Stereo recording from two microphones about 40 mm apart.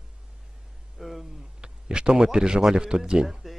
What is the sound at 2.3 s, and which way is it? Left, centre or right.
Speech, right.